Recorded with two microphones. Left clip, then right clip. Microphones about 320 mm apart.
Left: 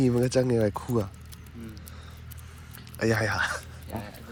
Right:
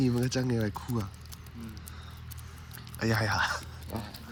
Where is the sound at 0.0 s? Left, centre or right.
Centre.